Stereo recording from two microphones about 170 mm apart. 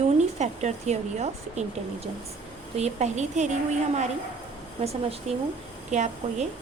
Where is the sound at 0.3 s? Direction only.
45° right (ahead or behind).